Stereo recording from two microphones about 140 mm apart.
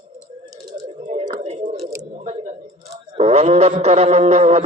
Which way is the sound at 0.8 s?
55° right (ahead or behind).